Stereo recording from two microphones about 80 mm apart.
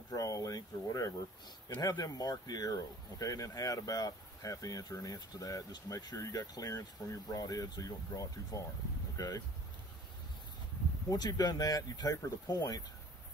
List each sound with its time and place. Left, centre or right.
0.1 s speech: left
11.1 s speech: left